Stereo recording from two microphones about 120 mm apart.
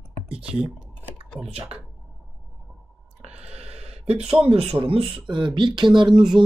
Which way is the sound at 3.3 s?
60° right (ahead or behind).